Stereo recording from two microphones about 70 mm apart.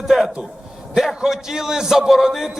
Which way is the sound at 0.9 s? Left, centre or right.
Centre.